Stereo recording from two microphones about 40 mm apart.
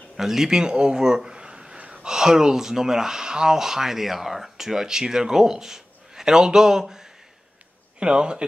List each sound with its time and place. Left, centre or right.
0.2 s speech: centre
8.0 s speech: right